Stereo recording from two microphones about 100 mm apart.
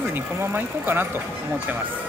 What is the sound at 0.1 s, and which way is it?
Speech, 20° right (ahead or behind).